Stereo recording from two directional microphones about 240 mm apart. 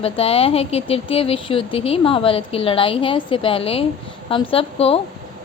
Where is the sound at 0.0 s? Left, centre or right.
Left.